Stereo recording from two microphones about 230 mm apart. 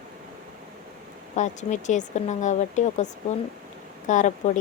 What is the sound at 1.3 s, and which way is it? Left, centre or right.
Speech, left.